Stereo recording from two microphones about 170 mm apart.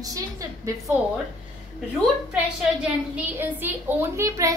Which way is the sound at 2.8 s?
10° right (ahead or behind).